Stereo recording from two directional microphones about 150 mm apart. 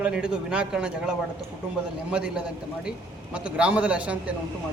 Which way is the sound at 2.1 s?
5° right (ahead or behind).